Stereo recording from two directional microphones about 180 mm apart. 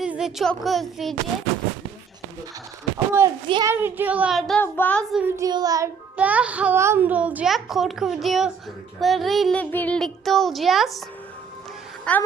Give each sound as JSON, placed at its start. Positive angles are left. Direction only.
{"t": 0.0, "sound": "speech", "side_deg": -5}
{"t": 3.1, "sound": "a child's voice", "side_deg": -15}
{"t": 5.4, "sound": "child singing", "side_deg": -20}
{"t": 6.1, "sound": "a child's voice", "side_deg": -5}
{"t": 9.0, "sound": "a sound", "side_deg": 0}
{"t": 12.1, "sound": "speech", "side_deg": 5}